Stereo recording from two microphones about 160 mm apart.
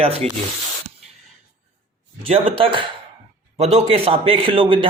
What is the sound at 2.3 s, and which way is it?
Speech, 35° right (ahead or behind).